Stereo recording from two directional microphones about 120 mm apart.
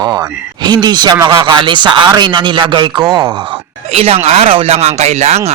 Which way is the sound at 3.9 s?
55° right (ahead or behind).